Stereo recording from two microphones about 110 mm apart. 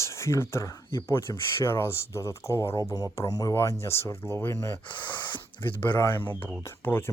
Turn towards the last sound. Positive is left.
turn(degrees=20)  # may be behind; listen again after turning